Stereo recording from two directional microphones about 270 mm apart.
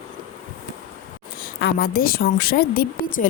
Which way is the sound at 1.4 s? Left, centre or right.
Left.